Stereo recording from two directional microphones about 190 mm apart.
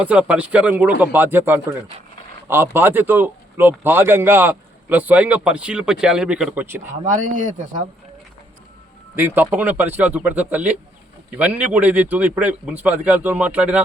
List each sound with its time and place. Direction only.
0.0 s a man's voice: 5° right (ahead or behind)
7.0 s speech: 40° right (ahead or behind)
9.1 s a man's voice: 10° right (ahead or behind)